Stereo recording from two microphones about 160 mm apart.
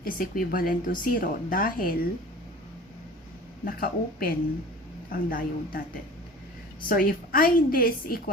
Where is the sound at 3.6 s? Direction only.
65° left (ahead or behind).